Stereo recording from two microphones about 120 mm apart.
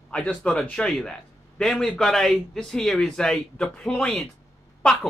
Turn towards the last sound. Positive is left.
turn(degrees=5)  # may be behind; listen again after turning